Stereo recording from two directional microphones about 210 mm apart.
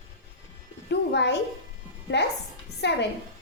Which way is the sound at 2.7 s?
55° left (ahead or behind).